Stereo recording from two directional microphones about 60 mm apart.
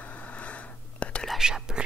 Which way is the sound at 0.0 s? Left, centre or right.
Left.